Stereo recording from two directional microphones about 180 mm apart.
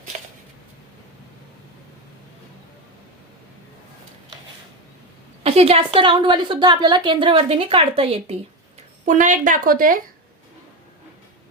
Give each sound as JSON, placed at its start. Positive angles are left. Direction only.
{"t": 5.4, "sound": "a woman's voice", "side_deg": -35}
{"t": 9.0, "sound": "a woman's voice", "side_deg": -45}